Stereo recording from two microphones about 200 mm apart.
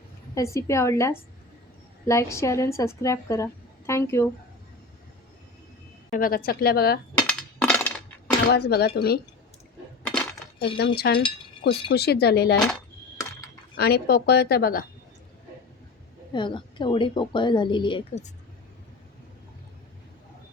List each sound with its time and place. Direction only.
0.3 s a woman's voice: 15° left (ahead or behind)
6.1 s a woman's voice: 45° left (ahead or behind)
7.2 s a sound: 5° left (ahead or behind)
8.5 s a woman's voice: 55° left (ahead or behind)
10.8 s a woman's voice: 50° left (ahead or behind)
13.7 s a woman's voice: 50° left (ahead or behind)
16.3 s a woman's voice: 25° left (ahead or behind)